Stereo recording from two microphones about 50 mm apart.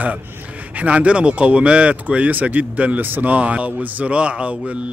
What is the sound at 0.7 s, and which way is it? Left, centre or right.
Speech, right.